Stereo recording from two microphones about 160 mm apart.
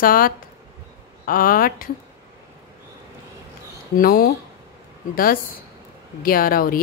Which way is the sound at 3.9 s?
70° left (ahead or behind).